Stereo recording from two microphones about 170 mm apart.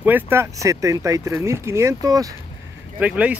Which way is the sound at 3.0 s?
10° right (ahead or behind).